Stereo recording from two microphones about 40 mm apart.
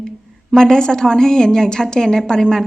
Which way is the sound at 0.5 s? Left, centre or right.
Centre.